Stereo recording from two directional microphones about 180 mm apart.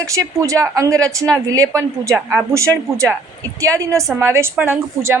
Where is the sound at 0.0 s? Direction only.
20° right (ahead or behind).